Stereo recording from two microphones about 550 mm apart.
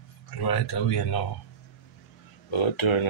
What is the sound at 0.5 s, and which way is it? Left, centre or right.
Speech, left.